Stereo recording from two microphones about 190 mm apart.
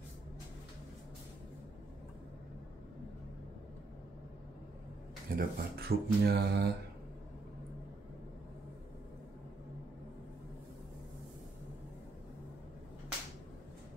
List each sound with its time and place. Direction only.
5.3 s speech: 55° right (ahead or behind)